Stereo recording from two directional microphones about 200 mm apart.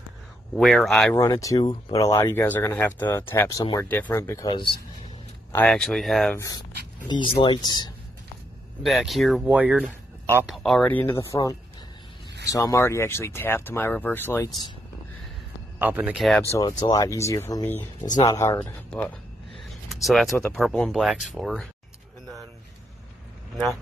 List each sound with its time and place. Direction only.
0.6 s speech: centre (ahead or behind)
1.1 s speech: 15° left (ahead or behind)
5.5 s speech: 5° left (ahead or behind)
7.1 s speech: 25° left (ahead or behind)
8.8 s speech: centre (ahead or behind)
12.5 s speech: 15° left (ahead or behind)
15.8 s speech: 10° right (ahead or behind)
16.4 s speech: 20° left (ahead or behind); by 21.6 s centre (ahead or behind)